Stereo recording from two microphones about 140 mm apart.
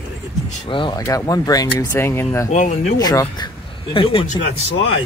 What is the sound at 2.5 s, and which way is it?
Speech, 60° left (ahead or behind).